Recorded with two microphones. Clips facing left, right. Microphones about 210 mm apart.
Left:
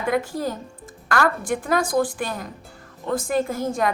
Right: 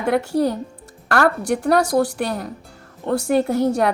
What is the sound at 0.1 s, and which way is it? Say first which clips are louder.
A woman's voice: right 6 dB; 70° right (ahead or behind).